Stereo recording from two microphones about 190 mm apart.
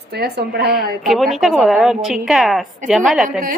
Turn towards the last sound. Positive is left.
turn(degrees=0)  # may be behind; listen again after turning